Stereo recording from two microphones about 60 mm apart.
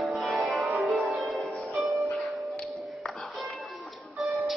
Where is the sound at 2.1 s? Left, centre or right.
Centre.